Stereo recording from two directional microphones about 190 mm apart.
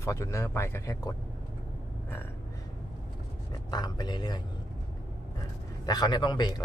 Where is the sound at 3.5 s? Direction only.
20° left (ahead or behind).